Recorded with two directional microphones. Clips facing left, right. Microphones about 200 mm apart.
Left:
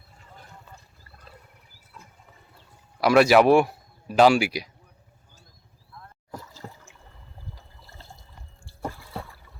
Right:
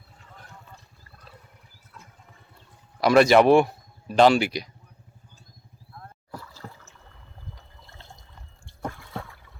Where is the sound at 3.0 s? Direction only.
5° left (ahead or behind).